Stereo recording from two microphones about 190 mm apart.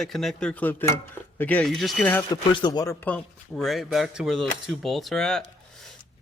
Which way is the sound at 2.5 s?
20° left (ahead or behind).